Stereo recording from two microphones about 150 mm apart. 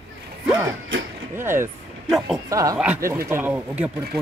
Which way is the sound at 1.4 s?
15° right (ahead or behind).